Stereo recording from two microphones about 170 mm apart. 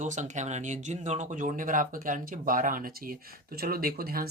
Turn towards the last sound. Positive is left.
turn(degrees=-60)  # may be behind; listen again after turning